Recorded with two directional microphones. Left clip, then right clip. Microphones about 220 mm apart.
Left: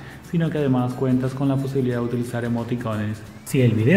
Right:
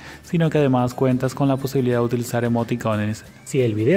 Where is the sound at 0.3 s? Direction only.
50° right (ahead or behind).